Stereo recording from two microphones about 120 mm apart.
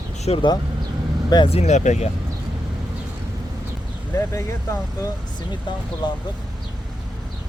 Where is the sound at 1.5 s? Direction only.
70° left (ahead or behind).